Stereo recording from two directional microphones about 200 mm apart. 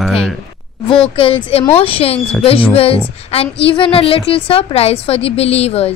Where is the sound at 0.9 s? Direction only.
25° left (ahead or behind).